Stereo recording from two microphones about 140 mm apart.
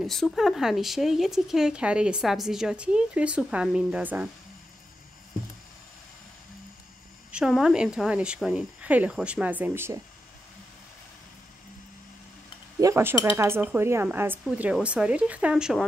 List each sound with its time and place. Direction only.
0.0 s speech: centre (ahead or behind)
7.2 s speech: 5° right (ahead or behind)
12.8 s speech: 20° right (ahead or behind); by 15.8 s 5° right (ahead or behind)